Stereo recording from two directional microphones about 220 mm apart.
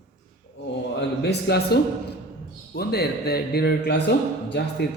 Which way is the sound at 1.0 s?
50° left (ahead or behind).